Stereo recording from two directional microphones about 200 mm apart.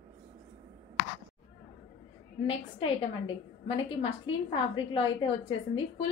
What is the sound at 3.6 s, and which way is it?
A woman's voice, 25° left (ahead or behind).